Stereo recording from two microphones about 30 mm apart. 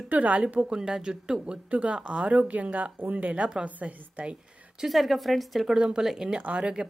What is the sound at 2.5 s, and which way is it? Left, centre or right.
A woman's voice, right.